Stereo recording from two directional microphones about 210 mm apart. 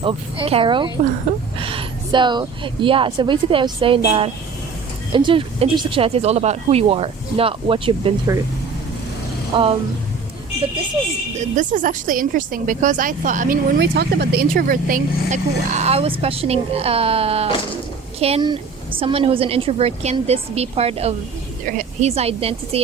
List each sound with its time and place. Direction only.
0.0 s speech: 25° right (ahead or behind)
9.5 s speech: 25° right (ahead or behind)
11.3 s speech: 35° right (ahead or behind)
13.7 s speech: 50° right (ahead or behind); by 22.8 s 30° right (ahead or behind)